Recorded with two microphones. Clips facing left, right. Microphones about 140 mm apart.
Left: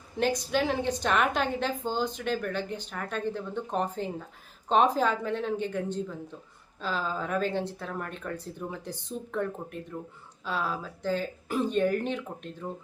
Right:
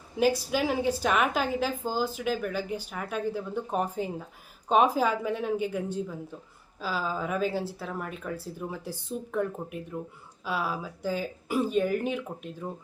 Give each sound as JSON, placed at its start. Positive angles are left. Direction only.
{"t": 0.2, "sound": "a woman's voice", "side_deg": -5}